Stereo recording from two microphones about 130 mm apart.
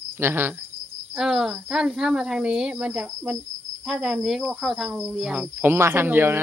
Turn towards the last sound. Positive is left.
turn(degrees=-15)  # may be behind; listen again after turning